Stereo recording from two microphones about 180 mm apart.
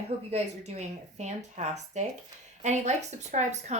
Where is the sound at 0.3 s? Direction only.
35° right (ahead or behind).